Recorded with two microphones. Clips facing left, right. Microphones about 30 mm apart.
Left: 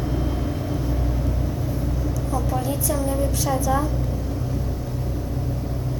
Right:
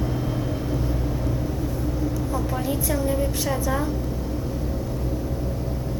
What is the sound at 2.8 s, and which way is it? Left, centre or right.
Speech, centre.